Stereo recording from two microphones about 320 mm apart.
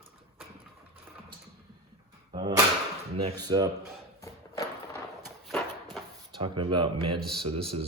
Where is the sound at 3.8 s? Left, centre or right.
Centre.